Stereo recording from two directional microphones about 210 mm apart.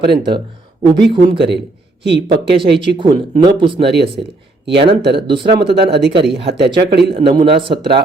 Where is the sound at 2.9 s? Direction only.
20° right (ahead or behind).